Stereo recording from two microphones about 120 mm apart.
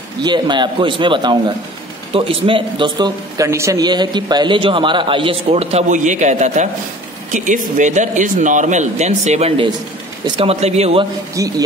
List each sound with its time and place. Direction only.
0.2 s a man's voice: 40° right (ahead or behind)
3.3 s a man's voice: 25° right (ahead or behind); by 9.5 s 70° right (ahead or behind)
10.2 s a man's voice: 45° right (ahead or behind)
10.5 s speech: 65° right (ahead or behind)
11.3 s speech: 30° right (ahead or behind)